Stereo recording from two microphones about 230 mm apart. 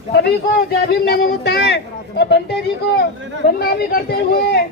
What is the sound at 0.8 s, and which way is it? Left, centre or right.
Speech, left.